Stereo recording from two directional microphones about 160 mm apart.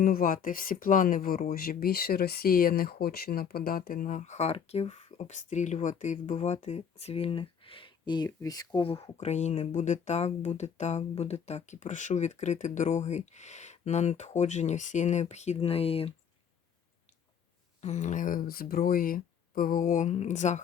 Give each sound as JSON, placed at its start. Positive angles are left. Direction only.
{"t": 0.0, "sound": "speech", "side_deg": 60}
{"t": 9.1, "sound": "speech", "side_deg": 45}
{"t": 17.7, "sound": "speech", "side_deg": 45}